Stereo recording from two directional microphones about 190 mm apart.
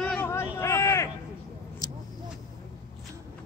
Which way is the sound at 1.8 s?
20° left (ahead or behind).